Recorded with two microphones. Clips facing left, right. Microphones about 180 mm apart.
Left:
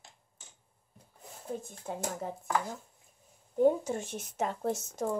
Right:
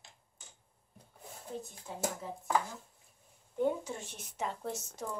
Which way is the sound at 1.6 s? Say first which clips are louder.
Left 1 dB; 50° left (ahead or behind).